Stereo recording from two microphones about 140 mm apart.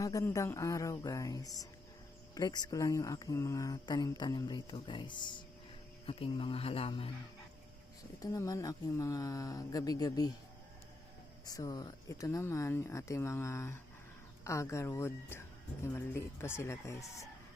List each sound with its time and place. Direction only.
0.0 s speech: 25° left (ahead or behind); by 7.1 s 40° left (ahead or behind)
8.2 s speech: 25° left (ahead or behind)
11.4 s speech: 25° left (ahead or behind)